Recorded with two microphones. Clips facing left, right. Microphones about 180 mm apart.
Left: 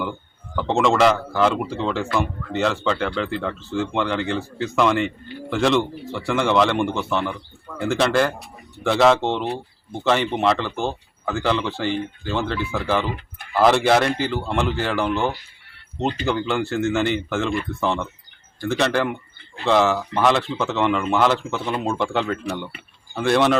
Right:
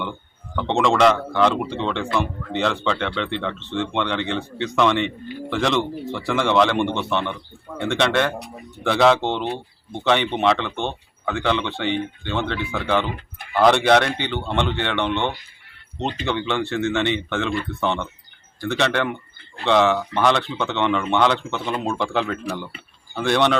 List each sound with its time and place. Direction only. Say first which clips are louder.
0.5 s speech: left 1 dB; centre (ahead or behind)